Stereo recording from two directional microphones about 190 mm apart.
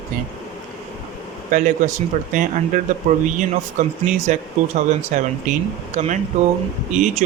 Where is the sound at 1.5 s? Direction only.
40° right (ahead or behind).